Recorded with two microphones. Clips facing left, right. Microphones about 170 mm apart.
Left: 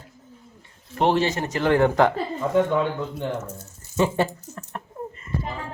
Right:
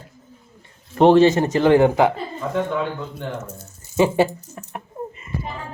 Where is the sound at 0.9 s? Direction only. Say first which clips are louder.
Right 8 dB; 30° right (ahead or behind).